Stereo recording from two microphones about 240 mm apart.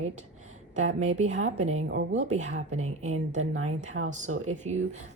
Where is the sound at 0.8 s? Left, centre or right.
Right.